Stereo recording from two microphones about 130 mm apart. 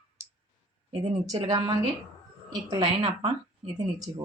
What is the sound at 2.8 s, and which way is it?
Speech, 45° right (ahead or behind).